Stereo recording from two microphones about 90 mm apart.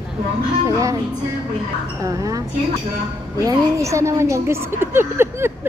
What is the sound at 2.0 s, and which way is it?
Speech, 40° right (ahead or behind).